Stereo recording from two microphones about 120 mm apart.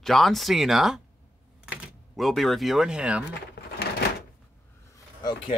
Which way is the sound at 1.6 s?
10° right (ahead or behind).